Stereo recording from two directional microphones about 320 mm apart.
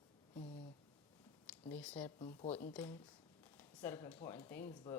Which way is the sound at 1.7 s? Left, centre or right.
Centre.